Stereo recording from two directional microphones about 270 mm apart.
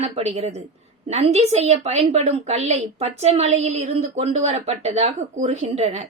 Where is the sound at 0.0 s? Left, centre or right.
Right.